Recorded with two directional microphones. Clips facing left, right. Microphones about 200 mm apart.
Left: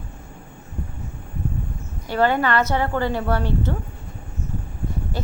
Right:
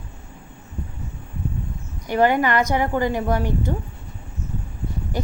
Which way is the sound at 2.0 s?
15° right (ahead or behind).